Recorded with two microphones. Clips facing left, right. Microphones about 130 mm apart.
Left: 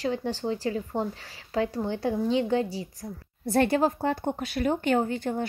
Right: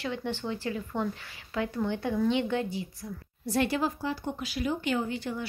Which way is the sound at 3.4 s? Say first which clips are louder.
Left 5 dB; 50° left (ahead or behind).